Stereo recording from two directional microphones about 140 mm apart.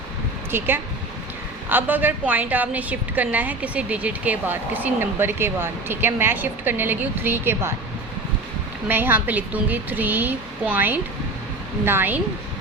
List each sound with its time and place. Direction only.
0.5 s a woman's voice: 15° right (ahead or behind)
1.7 s a woman's voice: 15° right (ahead or behind)
8.9 s a woman's voice: 15° right (ahead or behind)